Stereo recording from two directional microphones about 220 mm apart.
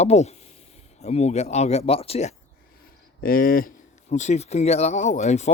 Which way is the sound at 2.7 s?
40° left (ahead or behind).